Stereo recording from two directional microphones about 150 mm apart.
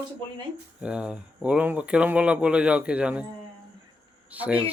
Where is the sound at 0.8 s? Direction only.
5° right (ahead or behind).